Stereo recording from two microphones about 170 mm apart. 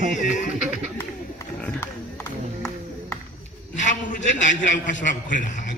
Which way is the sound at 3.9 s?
45° left (ahead or behind).